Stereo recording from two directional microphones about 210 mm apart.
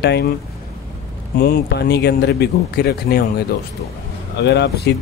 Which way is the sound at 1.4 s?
50° left (ahead or behind).